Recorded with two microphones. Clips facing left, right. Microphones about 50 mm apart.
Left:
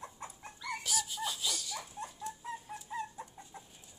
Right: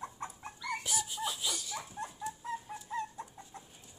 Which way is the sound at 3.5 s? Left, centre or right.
Centre.